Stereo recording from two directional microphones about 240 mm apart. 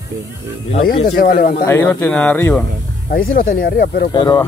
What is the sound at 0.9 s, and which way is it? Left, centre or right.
Speech, left.